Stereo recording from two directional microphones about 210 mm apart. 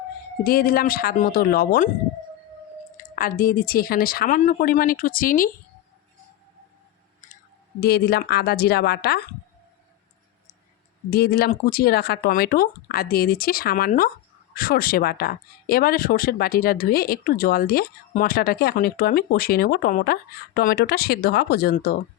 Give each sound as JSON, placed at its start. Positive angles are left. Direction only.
{"t": 0.4, "sound": "speech", "side_deg": 45}
{"t": 3.0, "sound": "speech", "side_deg": 40}
{"t": 7.8, "sound": "speech", "side_deg": 50}
{"t": 11.1, "sound": "speech", "side_deg": 50}